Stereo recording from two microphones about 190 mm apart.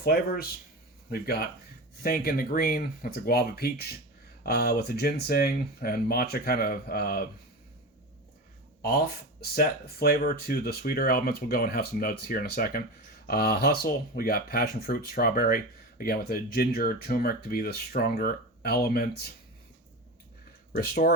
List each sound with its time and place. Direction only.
0.0 s speech: 55° left (ahead or behind)
8.8 s speech: 50° left (ahead or behind)
20.7 s speech: 55° left (ahead or behind)